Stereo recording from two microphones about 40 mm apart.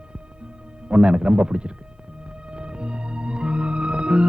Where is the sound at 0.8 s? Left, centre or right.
Right.